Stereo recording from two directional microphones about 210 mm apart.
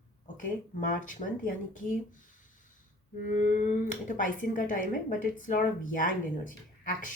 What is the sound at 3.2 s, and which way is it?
Speech, 35° left (ahead or behind).